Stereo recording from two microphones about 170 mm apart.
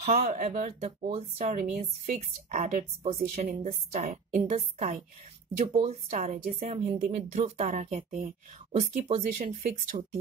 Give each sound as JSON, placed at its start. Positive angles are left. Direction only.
{"t": 0.2, "sound": "a woman's voice", "side_deg": -45}
{"t": 3.2, "sound": "a woman's voice", "side_deg": -50}